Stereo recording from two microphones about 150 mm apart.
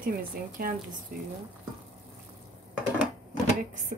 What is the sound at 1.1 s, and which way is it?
Speech, 65° right (ahead or behind).